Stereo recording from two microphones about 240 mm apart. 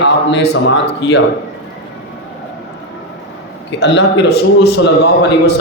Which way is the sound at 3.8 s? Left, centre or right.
Left.